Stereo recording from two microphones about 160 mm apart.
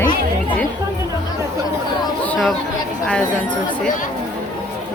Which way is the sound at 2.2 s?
Centre (ahead or behind).